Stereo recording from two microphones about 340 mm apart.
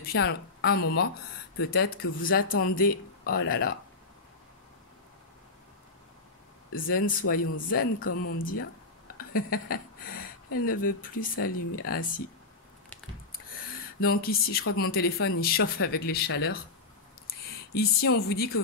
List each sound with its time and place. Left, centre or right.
0.1 s speech: left
6.7 s speech: left
8.1 s a woman's voice: left
8.5 s speech: left
14.2 s speech: left
17.7 s speech: left